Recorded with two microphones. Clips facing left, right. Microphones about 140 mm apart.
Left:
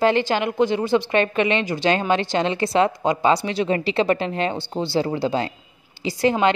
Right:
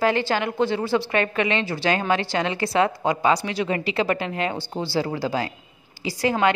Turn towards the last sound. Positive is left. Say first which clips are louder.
# left 4 dB
turn(degrees=25)  # may be behind; listen again after turning